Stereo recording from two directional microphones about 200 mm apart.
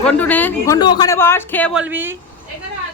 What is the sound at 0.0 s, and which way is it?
Speech, 10° left (ahead or behind).